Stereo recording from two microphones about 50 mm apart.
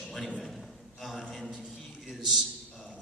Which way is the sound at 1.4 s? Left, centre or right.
Centre.